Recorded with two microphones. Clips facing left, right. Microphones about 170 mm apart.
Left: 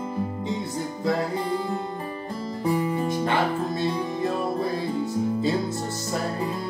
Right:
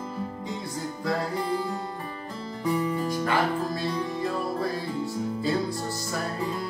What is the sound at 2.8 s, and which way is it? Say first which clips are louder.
Music: left 2 dB; 20° left (ahead or behind).